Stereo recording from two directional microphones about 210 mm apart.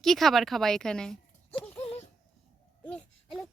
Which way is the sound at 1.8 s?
30° left (ahead or behind).